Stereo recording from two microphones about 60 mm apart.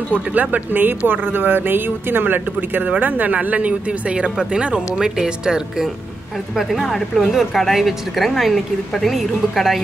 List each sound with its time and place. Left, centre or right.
0.1 s speech: right; by 5.9 s centre
6.5 s a woman's voice: centre